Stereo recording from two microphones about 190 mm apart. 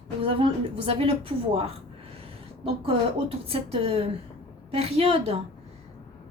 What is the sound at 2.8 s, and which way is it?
A woman's voice, 30° right (ahead or behind).